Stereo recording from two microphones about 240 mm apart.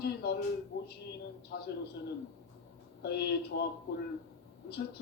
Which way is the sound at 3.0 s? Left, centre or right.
Left.